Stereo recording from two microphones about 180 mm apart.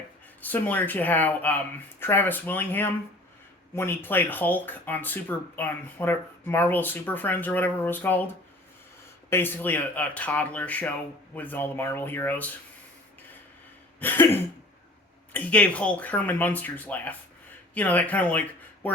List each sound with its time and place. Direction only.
0.4 s speech: 10° left (ahead or behind)
9.3 s speech: 10° left (ahead or behind)
14.0 s speech: 10° left (ahead or behind)